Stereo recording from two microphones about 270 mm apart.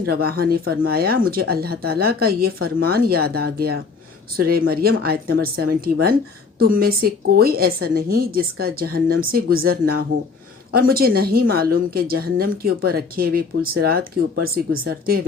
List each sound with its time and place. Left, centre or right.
0.0 s speech: right